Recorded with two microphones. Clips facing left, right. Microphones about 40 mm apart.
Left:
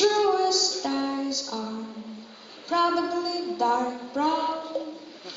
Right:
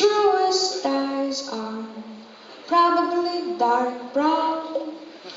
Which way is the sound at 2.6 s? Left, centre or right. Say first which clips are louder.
Right 6 dB; centre.